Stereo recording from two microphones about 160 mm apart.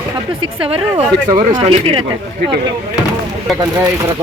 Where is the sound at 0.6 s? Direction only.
35° right (ahead or behind).